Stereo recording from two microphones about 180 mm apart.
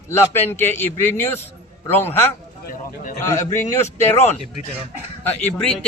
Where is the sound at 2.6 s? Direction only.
45° left (ahead or behind).